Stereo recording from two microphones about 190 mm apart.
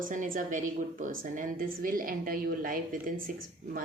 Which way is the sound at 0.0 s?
45° right (ahead or behind).